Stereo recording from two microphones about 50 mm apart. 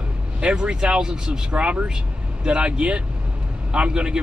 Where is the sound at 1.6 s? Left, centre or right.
Right.